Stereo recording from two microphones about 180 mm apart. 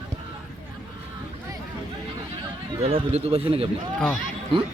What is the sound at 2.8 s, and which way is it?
Speech, 35° right (ahead or behind).